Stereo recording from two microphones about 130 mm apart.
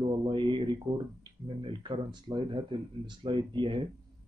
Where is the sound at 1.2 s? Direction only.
35° right (ahead or behind).